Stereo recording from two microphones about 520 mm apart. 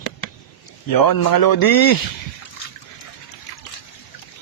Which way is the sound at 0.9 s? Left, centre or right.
Left.